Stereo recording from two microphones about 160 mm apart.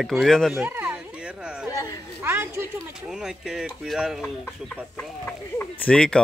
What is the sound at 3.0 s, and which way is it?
Speech, 5° right (ahead or behind).